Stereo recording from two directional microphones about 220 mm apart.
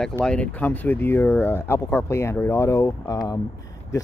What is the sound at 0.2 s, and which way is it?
Speech, 5° left (ahead or behind).